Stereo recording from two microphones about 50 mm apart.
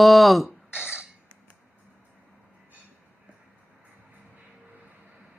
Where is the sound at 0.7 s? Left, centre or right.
Right.